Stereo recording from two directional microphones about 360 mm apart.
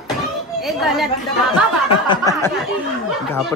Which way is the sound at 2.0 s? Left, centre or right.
Centre.